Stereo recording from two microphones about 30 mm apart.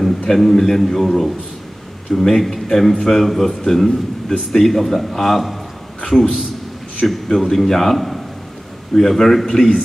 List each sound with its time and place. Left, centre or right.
0.3 s a man's voice: centre
7.9 s a man's voice: centre
8.9 s a man's voice: centre